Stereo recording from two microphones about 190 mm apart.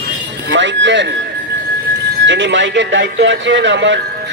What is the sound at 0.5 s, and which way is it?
Speech, 70° right (ahead or behind).